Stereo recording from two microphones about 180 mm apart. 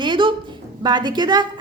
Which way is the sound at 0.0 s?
25° right (ahead or behind).